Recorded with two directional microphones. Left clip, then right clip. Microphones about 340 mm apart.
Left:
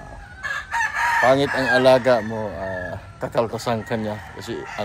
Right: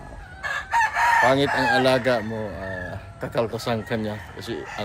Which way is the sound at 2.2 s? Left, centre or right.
Centre.